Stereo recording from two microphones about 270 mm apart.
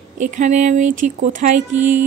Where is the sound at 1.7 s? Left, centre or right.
Right.